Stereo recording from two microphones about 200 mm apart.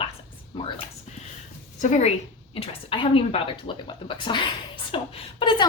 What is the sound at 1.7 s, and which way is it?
A woman's voice, 35° left (ahead or behind).